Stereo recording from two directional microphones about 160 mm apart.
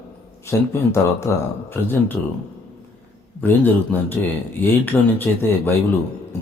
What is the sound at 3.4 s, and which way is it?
A man's voice, 10° left (ahead or behind).